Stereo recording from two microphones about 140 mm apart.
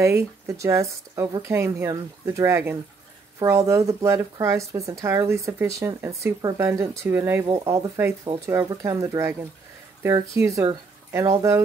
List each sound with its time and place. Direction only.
0.0 s speech: 20° right (ahead or behind)
7.4 s speech: 25° right (ahead or behind)